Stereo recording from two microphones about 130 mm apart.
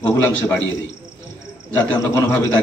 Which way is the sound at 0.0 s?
20° left (ahead or behind).